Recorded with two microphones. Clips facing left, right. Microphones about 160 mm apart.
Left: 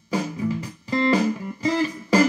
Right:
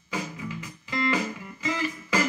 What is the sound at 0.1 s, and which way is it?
Music, 35° left (ahead or behind).